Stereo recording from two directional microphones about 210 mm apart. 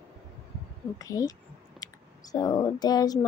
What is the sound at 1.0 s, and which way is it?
A woman's voice, 15° left (ahead or behind).